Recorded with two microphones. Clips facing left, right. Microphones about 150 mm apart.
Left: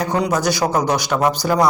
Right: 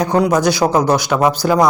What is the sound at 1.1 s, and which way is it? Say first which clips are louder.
Speech: right 3 dB; 10° right (ahead or behind).